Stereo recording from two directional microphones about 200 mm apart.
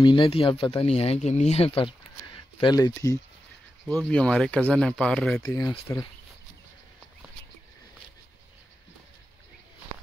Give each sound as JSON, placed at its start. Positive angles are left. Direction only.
{"t": 0.0, "sound": "speech", "side_deg": 25}
{"t": 3.8, "sound": "speech", "side_deg": 5}